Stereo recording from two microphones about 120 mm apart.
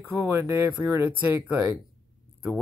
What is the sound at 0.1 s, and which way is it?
Speech, 20° right (ahead or behind).